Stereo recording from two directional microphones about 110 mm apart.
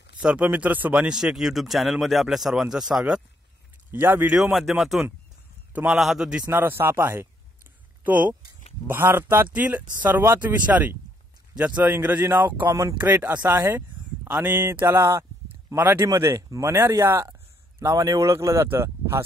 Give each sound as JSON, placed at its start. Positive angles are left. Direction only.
{"t": 0.2, "sound": "speech", "side_deg": -10}
{"t": 3.9, "sound": "speech", "side_deg": -20}
{"t": 4.3, "sound": "speech", "side_deg": -5}
{"t": 5.7, "sound": "a man's voice", "side_deg": -15}
{"t": 5.9, "sound": "speech", "side_deg": -5}
{"t": 6.5, "sound": "speech", "side_deg": -20}